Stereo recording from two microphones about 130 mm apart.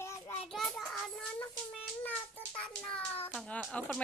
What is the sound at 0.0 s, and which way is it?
Child singing, 20° left (ahead or behind).